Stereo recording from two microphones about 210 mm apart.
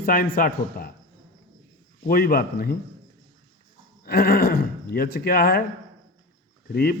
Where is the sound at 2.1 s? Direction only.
45° left (ahead or behind).